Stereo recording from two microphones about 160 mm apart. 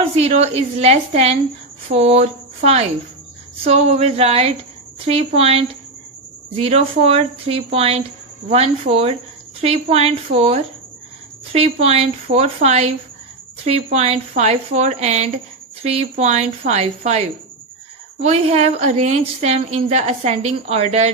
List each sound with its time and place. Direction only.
0.0 s a woman's voice: 40° right (ahead or behind)
18.2 s a woman's voice: 40° right (ahead or behind)